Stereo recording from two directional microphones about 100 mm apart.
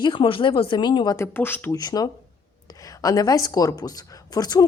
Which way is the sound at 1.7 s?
40° left (ahead or behind).